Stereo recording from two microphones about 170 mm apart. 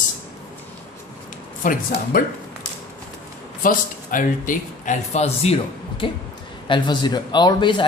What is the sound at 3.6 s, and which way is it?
Speech, 55° left (ahead or behind).